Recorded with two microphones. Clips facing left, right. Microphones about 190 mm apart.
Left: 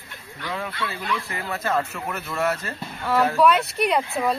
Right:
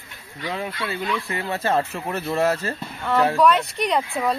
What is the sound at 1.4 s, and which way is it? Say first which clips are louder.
Speech: right 2 dB; 30° right (ahead or behind).